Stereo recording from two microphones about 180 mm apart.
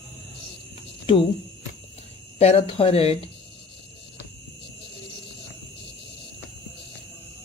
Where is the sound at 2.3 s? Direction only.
35° left (ahead or behind).